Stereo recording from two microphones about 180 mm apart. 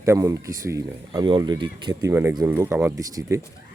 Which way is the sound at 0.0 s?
15° right (ahead or behind).